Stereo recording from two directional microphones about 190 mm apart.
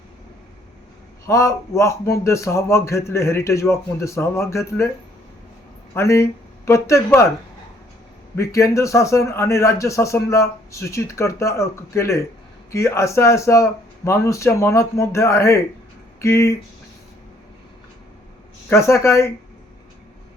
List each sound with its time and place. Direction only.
1.3 s a man's voice: 15° left (ahead or behind)
5.9 s a man's voice: 15° left (ahead or behind)
8.4 s a man's voice: 15° left (ahead or behind)
18.7 s a man's voice: 15° left (ahead or behind)